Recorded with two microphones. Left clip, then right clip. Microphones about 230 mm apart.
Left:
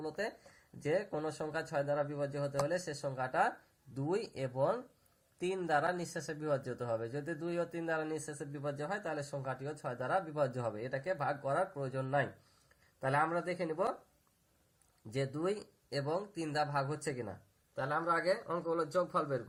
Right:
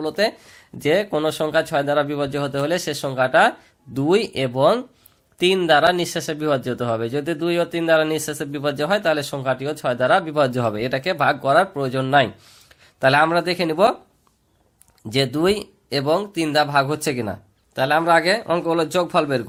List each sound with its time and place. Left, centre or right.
0.0 s speech: right
15.1 s speech: right
17.7 s a man's voice: right